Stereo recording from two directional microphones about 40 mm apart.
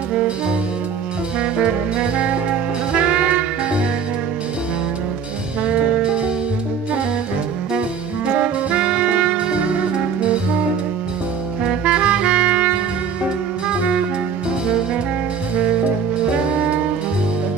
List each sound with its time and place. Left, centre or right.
1.4 s music: right
5.6 s jazz: right
8.3 s saxophone: right
11.8 s music: right
15.5 s music: right